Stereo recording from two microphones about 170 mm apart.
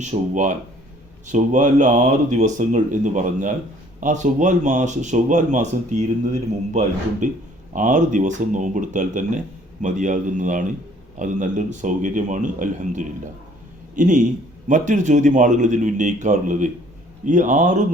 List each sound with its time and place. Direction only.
0.0 s speech: 45° right (ahead or behind)
7.2 s speech: 45° right (ahead or behind)